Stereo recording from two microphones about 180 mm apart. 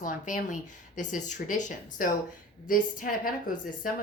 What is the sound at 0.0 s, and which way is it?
A woman's voice, 45° left (ahead or behind).